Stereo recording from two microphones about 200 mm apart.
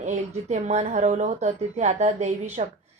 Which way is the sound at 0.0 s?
35° right (ahead or behind).